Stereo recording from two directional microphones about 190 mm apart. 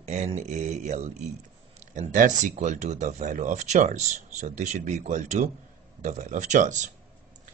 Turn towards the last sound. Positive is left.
turn(degrees=-40)  # may be behind; listen again after turning